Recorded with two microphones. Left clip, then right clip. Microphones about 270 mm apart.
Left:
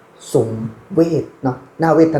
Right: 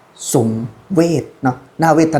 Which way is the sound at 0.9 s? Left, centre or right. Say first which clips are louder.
Right 1 dB; right.